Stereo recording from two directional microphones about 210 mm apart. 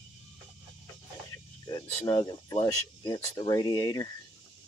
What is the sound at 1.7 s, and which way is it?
Speech, 20° left (ahead or behind).